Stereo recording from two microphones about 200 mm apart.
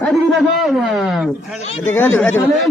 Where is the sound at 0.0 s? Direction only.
Centre (ahead or behind).